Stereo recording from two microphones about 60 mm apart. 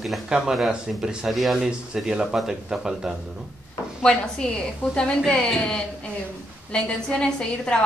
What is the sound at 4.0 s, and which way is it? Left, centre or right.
A woman's voice, centre.